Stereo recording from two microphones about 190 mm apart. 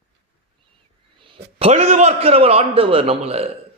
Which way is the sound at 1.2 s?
30° right (ahead or behind).